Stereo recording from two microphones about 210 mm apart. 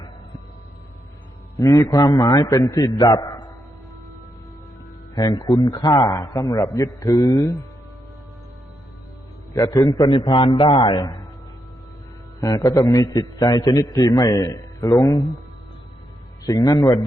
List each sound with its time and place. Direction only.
1.5 s a man's voice: 15° left (ahead or behind)
5.1 s a man's voice: 20° left (ahead or behind)
9.5 s a man's voice: 15° left (ahead or behind)
12.4 s a man's voice: 15° left (ahead or behind)
16.5 s a man's voice: 20° left (ahead or behind)